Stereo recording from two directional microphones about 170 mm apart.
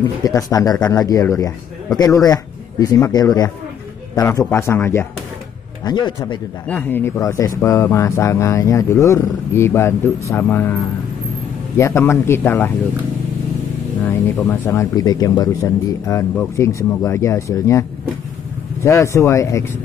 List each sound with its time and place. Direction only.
0.2 s speech: 20° left (ahead or behind)
5.9 s speech: 25° left (ahead or behind)
6.7 s speech: 10° left (ahead or behind)
14.0 s speech: 10° left (ahead or behind)